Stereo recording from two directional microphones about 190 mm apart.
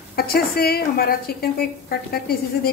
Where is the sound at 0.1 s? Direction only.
55° left (ahead or behind).